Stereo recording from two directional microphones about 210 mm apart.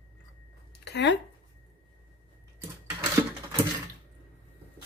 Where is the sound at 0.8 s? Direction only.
55° left (ahead or behind).